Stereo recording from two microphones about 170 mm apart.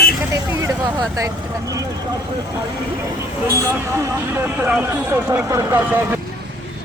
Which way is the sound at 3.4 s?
15° right (ahead or behind).